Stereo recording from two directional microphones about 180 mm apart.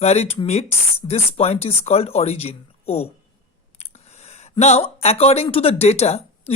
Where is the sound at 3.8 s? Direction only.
35° left (ahead or behind).